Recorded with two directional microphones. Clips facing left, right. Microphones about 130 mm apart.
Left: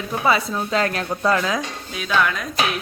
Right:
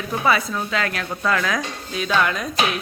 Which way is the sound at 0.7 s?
35° left (ahead or behind).